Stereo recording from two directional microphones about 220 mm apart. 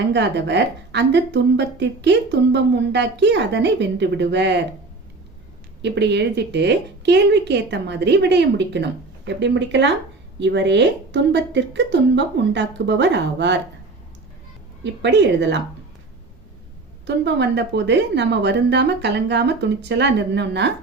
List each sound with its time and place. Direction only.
0.1 s a woman's voice: 50° right (ahead or behind)
5.8 s a woman's voice: 50° right (ahead or behind)
15.0 s a woman's voice: 50° right (ahead or behind)
17.1 s a woman's voice: 50° right (ahead or behind)